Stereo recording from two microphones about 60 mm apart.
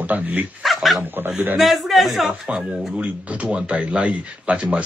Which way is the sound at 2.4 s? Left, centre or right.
Centre.